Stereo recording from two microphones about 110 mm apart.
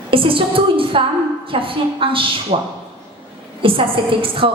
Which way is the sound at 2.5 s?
90° right.